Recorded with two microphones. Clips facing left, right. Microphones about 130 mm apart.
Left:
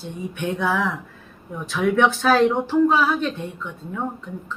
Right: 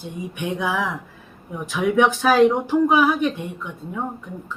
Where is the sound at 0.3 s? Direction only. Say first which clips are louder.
Left 1 dB; 15° right (ahead or behind).